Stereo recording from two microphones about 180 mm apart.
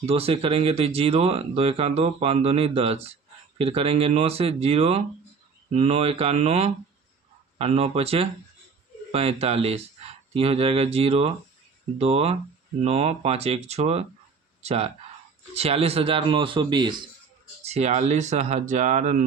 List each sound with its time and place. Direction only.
0.0 s speech: 35° right (ahead or behind)
17.6 s speech: 35° right (ahead or behind)